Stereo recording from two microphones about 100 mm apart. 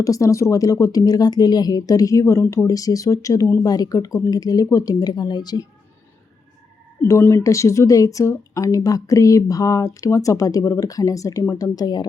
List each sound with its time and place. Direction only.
0.0 s speech: 35° left (ahead or behind)
7.1 s speech: 25° left (ahead or behind); by 12.0 s 40° left (ahead or behind)